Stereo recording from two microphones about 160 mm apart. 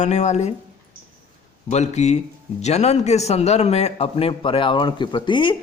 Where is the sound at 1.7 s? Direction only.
45° left (ahead or behind).